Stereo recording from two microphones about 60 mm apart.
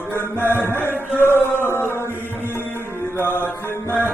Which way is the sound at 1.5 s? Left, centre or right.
Left.